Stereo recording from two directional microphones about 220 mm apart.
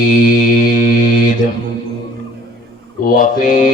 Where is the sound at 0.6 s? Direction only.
35° left (ahead or behind).